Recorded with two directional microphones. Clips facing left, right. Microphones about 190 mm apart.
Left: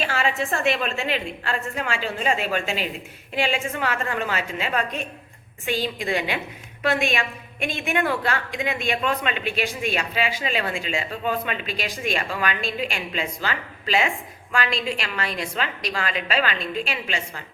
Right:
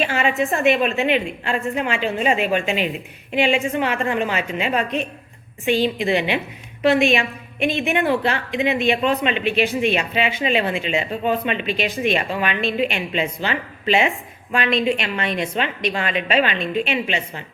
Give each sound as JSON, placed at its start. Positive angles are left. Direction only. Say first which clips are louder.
{"t": 0.1, "sound": "a woman's voice", "louder": "right 4 dB", "side_deg": -15}
{"t": 14.8, "sound": "speech", "louder": "right 6 dB", "side_deg": -25}